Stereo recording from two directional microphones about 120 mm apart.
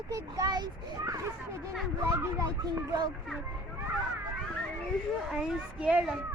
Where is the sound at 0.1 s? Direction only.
30° right (ahead or behind).